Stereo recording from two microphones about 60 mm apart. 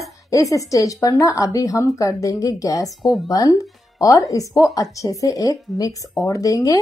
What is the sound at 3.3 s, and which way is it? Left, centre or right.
Speech, left.